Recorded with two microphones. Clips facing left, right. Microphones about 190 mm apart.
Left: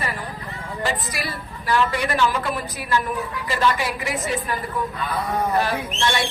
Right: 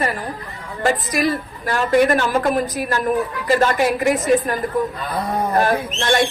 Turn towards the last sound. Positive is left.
turn(degrees=-45)  # may be behind; listen again after turning